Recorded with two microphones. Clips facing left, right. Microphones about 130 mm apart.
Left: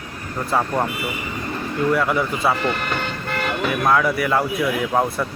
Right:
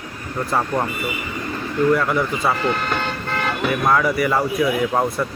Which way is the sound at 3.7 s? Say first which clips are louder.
Even; centre (ahead or behind).